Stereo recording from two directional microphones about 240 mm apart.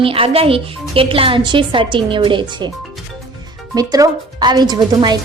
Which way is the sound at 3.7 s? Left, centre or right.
Centre.